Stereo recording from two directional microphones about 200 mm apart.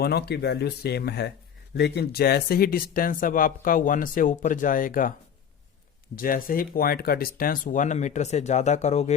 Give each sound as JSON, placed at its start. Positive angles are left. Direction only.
{"t": 0.0, "sound": "speech", "side_deg": 55}
{"t": 6.1, "sound": "speech", "side_deg": 45}